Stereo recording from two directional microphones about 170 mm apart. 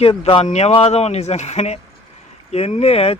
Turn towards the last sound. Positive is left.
turn(degrees=35)  # may be behind; listen again after turning